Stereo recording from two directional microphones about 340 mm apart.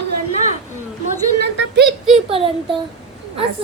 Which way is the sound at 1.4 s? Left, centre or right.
Right.